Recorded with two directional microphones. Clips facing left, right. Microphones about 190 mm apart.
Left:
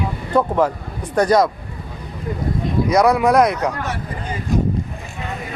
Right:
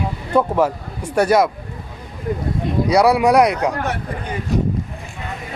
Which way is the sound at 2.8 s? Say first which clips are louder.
Right 1 dB; 10° right (ahead or behind).